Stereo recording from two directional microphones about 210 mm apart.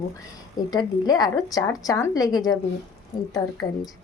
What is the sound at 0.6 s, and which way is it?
A woman's voice, 20° left (ahead or behind).